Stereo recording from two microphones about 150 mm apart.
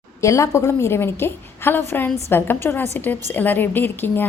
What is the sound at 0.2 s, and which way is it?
A woman's voice, 20° left (ahead or behind).